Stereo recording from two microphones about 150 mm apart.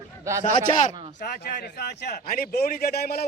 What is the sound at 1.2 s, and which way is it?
A man's voice, 90° left.